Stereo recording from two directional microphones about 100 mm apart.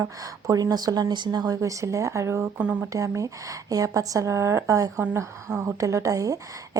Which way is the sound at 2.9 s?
35° right (ahead or behind).